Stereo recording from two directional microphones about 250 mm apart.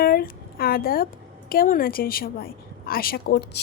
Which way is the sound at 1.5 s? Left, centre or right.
Left.